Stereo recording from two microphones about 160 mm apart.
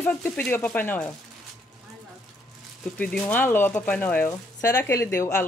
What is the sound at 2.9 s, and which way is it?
Speech, 10° left (ahead or behind).